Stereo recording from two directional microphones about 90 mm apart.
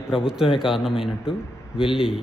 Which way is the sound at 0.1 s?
5° right (ahead or behind).